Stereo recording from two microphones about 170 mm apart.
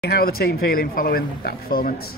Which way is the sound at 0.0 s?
65° left (ahead or behind).